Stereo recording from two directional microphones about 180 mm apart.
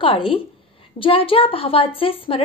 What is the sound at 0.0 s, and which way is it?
A woman's voice, 30° left (ahead or behind).